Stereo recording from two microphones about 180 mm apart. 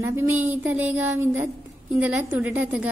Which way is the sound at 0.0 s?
15° right (ahead or behind).